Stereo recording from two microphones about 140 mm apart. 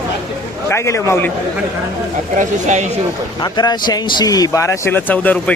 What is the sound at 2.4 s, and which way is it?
Speech, 60° right (ahead or behind).